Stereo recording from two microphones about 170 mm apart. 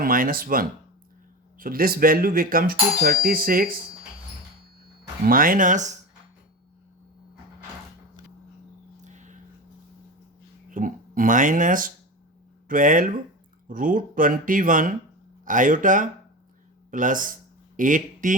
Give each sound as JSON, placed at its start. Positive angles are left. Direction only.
{"t": 0.0, "sound": "speech", "side_deg": -55}
{"t": 5.2, "sound": "speech", "side_deg": -55}
{"t": 9.0, "sound": "a sound", "side_deg": -45}
{"t": 10.7, "sound": "speech", "side_deg": -55}